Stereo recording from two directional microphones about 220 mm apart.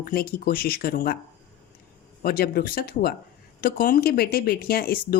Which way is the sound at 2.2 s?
45° left (ahead or behind).